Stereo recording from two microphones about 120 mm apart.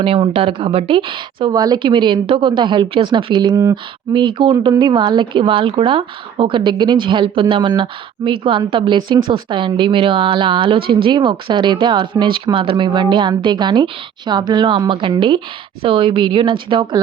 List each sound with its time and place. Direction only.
0.0 s a woman's voice: 50° right (ahead or behind)